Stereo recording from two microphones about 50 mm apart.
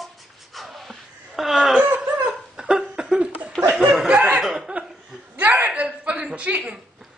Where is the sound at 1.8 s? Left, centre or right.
Right.